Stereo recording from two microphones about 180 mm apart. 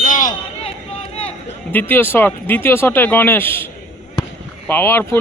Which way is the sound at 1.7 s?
10° left (ahead or behind).